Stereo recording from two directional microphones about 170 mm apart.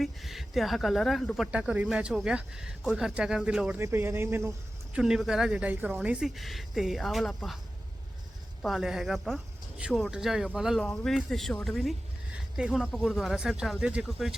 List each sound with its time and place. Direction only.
0.0 s speech: centre (ahead or behind)
4.9 s speech: 5° right (ahead or behind)
8.6 s speech: centre (ahead or behind)